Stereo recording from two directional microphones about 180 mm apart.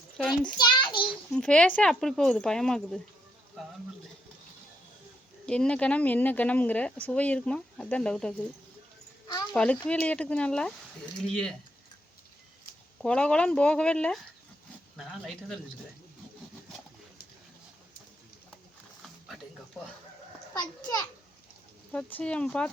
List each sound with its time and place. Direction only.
0.5 s a sound: 25° left (ahead or behind)
1.3 s speech: 5° left (ahead or behind)
5.5 s speech: 5° left (ahead or behind)
9.6 s speech: 5° left (ahead or behind)
13.0 s speech: 5° left (ahead or behind)
20.5 s a child's voice: 20° left (ahead or behind)
21.9 s speech: 5° left (ahead or behind)